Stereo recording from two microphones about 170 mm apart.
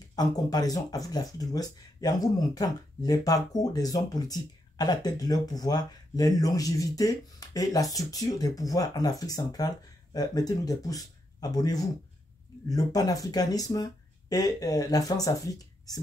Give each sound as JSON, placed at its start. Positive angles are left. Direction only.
{"t": 0.1, "sound": "speech", "side_deg": 20}